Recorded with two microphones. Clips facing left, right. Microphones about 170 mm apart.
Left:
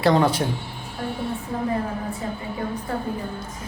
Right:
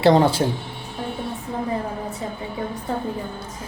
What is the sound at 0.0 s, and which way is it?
Speech, 30° right (ahead or behind).